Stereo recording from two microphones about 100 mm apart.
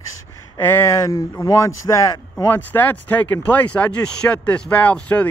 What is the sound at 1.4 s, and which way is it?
Speech, 30° left (ahead or behind).